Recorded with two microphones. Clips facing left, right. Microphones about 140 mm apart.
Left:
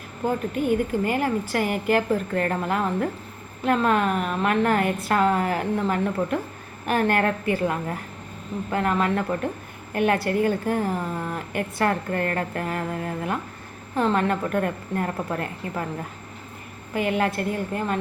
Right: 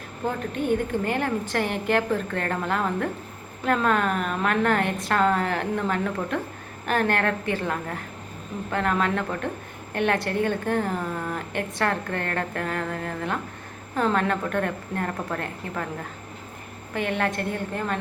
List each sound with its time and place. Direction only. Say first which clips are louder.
0.5 s a woman's voice: right 1 dB; 5° left (ahead or behind)
16.9 s a woman's voice: left 3 dB; 5° left (ahead or behind)